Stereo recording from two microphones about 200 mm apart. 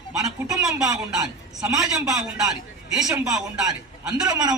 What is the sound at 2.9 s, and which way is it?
Speech, 5° right (ahead or behind).